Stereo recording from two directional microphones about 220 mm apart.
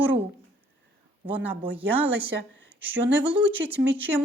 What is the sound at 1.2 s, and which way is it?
A woman's voice, 10° right (ahead or behind).